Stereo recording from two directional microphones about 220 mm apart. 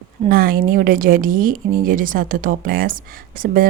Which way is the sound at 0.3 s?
40° right (ahead or behind).